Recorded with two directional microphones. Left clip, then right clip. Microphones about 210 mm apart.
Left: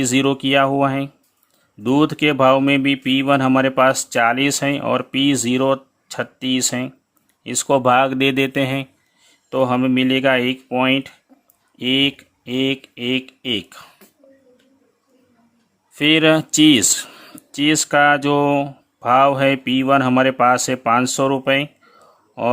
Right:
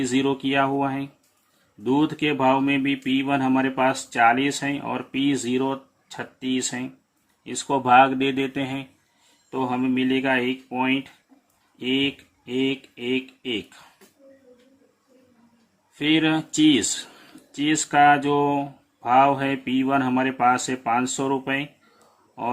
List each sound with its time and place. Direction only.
0.0 s speech: 50° left (ahead or behind)
16.0 s speech: 50° left (ahead or behind)